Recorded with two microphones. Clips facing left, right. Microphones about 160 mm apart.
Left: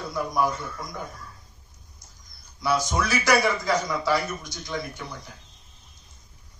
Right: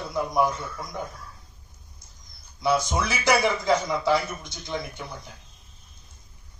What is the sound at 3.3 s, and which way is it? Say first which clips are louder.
A man's voice: right 2 dB; 20° right (ahead or behind).